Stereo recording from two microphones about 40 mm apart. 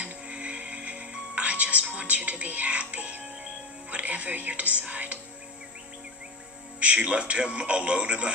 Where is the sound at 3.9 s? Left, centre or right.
Right.